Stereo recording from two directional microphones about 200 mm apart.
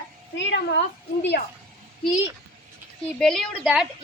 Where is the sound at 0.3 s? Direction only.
60° left (ahead or behind).